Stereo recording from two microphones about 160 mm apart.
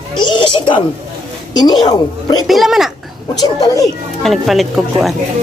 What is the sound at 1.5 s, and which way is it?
Speech, 25° left (ahead or behind).